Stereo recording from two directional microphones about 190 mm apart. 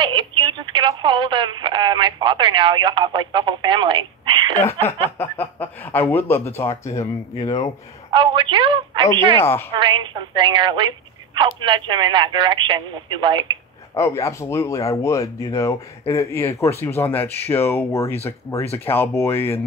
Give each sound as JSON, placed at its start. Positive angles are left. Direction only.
{"t": 0.1, "sound": "speech", "side_deg": -25}
{"t": 5.2, "sound": "speech", "side_deg": 10}
{"t": 8.1, "sound": "speech", "side_deg": -25}
{"t": 9.4, "sound": "speech", "side_deg": 10}
{"t": 9.8, "sound": "speech", "side_deg": -25}
{"t": 13.9, "sound": "speech", "side_deg": 15}